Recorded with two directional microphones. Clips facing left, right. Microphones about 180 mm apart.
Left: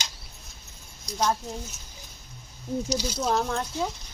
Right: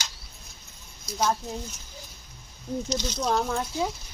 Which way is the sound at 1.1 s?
5° right (ahead or behind).